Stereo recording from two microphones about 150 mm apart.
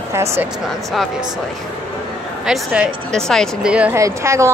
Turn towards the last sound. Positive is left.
turn(degrees=-20)  # may be behind; listen again after turning